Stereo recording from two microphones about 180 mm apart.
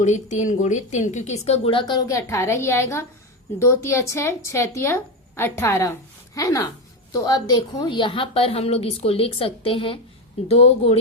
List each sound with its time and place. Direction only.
0.0 s a woman's voice: 40° left (ahead or behind)